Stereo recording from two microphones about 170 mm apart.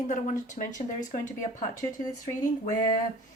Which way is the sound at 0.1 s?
45° left (ahead or behind).